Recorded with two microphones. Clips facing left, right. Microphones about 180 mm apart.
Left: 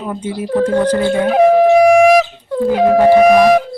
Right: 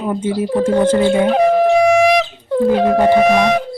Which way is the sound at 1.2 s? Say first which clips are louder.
Left 3 dB; 10° left (ahead or behind).